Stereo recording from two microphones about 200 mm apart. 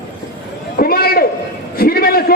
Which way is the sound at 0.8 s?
50° left (ahead or behind).